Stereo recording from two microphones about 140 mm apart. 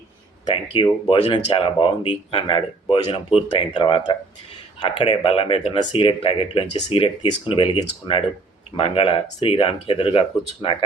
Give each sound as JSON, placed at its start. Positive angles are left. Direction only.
{"t": 0.4, "sound": "speech", "side_deg": 35}